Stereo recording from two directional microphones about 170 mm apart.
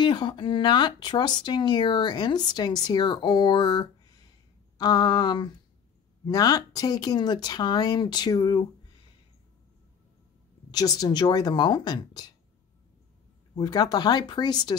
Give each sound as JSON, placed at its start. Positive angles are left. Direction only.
{"t": 0.0, "sound": "speech", "side_deg": 25}
{"t": 10.7, "sound": "speech", "side_deg": 20}
{"t": 13.6, "sound": "speech", "side_deg": 25}